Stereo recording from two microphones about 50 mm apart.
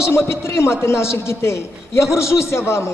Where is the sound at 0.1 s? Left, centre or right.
Left.